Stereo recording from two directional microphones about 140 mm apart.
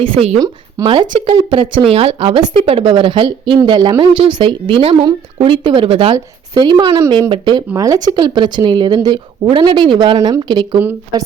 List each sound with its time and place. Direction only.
0.0 s speech: 45° right (ahead or behind)
0.3 s a woman's voice: 30° right (ahead or behind)
6.1 s a woman's voice: 30° right (ahead or behind)